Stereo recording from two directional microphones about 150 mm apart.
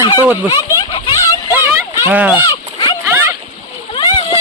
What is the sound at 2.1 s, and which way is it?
Speech, 10° right (ahead or behind).